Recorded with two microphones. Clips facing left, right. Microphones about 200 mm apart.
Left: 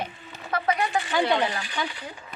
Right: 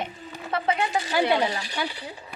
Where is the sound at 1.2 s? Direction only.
10° right (ahead or behind).